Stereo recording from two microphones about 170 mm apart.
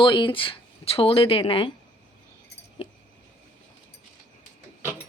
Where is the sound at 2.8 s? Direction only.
35° left (ahead or behind).